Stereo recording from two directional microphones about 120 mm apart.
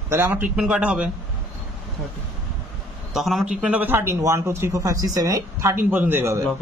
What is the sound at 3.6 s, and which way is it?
Speech, 15° right (ahead or behind).